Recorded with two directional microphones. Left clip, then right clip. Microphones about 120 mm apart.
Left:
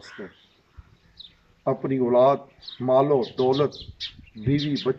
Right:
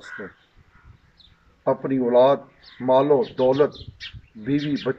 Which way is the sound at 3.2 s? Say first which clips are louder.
Right 3 dB; 40° left (ahead or behind).